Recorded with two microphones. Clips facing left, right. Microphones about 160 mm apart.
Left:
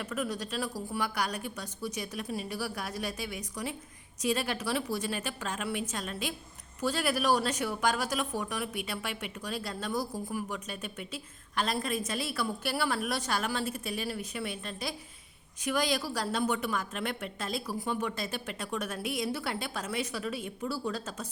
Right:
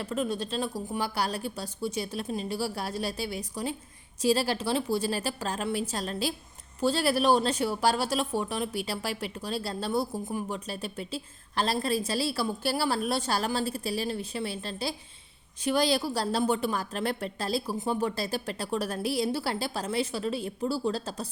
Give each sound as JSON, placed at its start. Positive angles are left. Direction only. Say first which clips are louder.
{"t": 0.0, "sound": "a woman's voice", "louder": "right 4 dB", "side_deg": -25}